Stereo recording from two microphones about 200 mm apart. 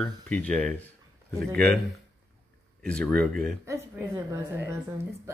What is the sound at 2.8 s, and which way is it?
Speech, 5° left (ahead or behind).